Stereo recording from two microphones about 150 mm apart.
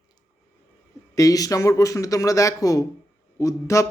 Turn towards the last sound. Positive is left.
turn(degrees=20)  # may be behind; listen again after turning